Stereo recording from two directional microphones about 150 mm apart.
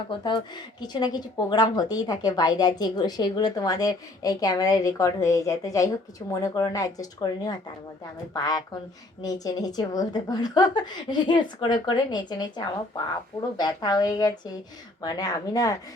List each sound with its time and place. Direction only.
0.1 s speech: 30° left (ahead or behind)